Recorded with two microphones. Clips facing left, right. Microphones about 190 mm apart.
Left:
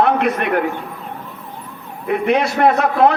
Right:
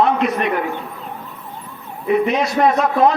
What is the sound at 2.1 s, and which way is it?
A man's voice, 65° left (ahead or behind).